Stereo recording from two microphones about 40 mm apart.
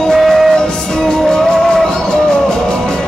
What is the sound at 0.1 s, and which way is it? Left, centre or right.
Music, centre.